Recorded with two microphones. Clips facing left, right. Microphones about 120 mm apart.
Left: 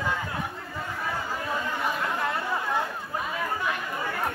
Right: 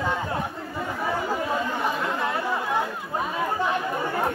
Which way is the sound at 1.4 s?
25° right (ahead or behind).